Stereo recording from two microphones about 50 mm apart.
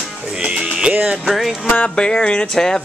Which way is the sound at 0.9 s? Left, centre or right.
Right.